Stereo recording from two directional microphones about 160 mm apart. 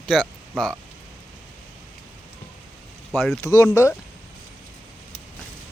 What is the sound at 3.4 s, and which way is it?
Speech, 20° left (ahead or behind).